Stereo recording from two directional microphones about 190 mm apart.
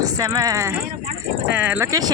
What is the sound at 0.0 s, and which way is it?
Speech, 20° right (ahead or behind).